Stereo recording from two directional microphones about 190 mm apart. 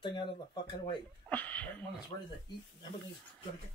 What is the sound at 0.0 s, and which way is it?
Speech, 25° left (ahead or behind).